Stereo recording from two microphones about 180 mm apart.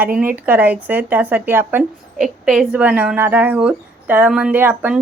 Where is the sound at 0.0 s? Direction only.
10° right (ahead or behind).